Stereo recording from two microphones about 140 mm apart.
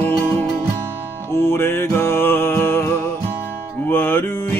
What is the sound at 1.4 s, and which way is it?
Music, 15° left (ahead or behind).